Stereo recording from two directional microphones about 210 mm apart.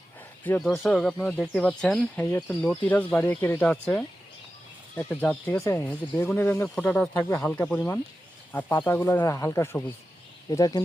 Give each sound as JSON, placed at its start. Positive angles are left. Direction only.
{"t": 0.4, "sound": "speech", "side_deg": 5}